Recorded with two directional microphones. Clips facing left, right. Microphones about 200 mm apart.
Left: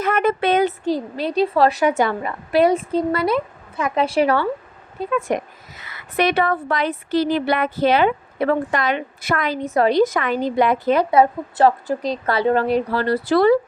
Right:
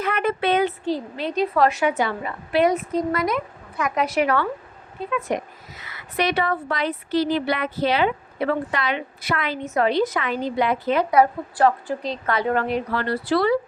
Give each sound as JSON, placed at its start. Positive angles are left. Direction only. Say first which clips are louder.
{"t": 0.0, "sound": "a woman's voice", "louder": "left 4 dB", "side_deg": 45}
{"t": 6.1, "sound": "speech", "louder": "left 4 dB", "side_deg": 55}
{"t": 11.1, "sound": "speech", "louder": "left 2 dB", "side_deg": 25}
{"t": 11.9, "sound": "a woman's voice", "louder": "left 4 dB", "side_deg": 40}